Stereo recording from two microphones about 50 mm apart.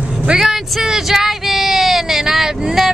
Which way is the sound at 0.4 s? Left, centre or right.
Centre.